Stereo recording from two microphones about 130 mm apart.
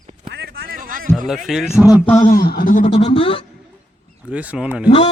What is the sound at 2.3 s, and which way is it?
Speech, 90° left.